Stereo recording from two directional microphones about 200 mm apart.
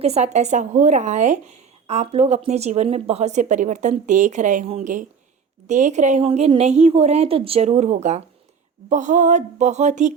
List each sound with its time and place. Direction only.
0.0 s speech: 30° right (ahead or behind)